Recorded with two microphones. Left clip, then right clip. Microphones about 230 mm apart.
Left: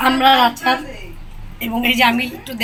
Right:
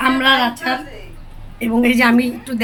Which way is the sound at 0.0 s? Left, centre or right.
Centre.